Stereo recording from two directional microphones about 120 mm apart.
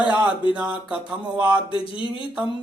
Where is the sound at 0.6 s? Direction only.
10° right (ahead or behind).